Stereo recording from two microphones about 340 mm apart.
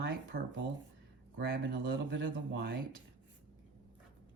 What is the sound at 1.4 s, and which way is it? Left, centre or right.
Speech, right.